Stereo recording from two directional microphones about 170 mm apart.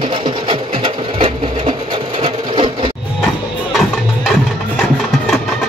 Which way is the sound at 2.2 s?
30° right (ahead or behind).